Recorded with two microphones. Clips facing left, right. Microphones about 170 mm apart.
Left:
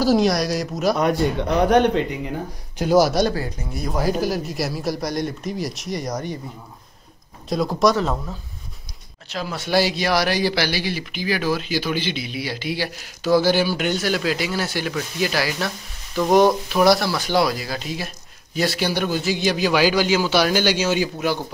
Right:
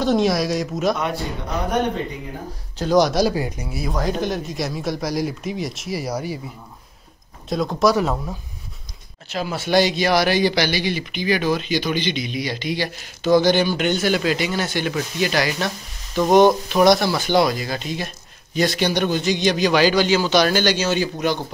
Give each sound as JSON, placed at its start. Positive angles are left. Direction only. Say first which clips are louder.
{"t": 0.0, "sound": "speech", "louder": "left 1 dB", "side_deg": 0}
{"t": 1.7, "sound": "speech", "louder": "left 4 dB", "side_deg": 80}
{"t": 2.8, "sound": "speech", "louder": "even", "side_deg": 5}
{"t": 3.3, "sound": "speech", "louder": "right 3 dB", "side_deg": -15}
{"t": 3.9, "sound": "speech", "louder": "left 2 dB", "side_deg": 5}
{"t": 7.4, "sound": "speech", "louder": "even", "side_deg": 0}
{"t": 7.9, "sound": "speech", "louder": "right 2 dB", "side_deg": -10}